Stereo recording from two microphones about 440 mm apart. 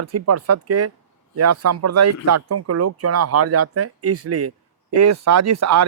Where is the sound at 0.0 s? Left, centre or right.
Right.